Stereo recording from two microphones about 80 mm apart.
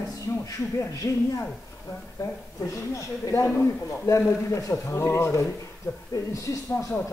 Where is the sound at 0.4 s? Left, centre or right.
Left.